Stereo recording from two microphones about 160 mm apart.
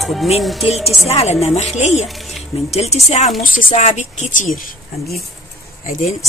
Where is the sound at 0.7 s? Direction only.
40° left (ahead or behind).